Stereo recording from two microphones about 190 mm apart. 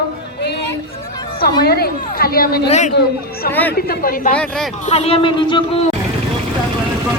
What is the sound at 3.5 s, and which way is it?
Speech, 10° left (ahead or behind).